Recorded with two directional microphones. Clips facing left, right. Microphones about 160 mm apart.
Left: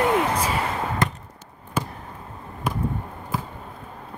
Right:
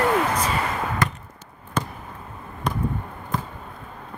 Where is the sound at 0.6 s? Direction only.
30° left (ahead or behind).